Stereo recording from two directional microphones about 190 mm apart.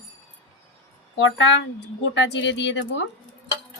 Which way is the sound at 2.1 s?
70° left (ahead or behind).